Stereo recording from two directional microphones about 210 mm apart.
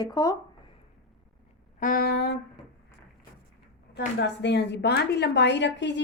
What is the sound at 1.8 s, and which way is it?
Speech, 45° left (ahead or behind).